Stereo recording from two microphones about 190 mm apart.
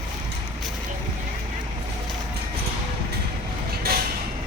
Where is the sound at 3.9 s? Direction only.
55° right (ahead or behind).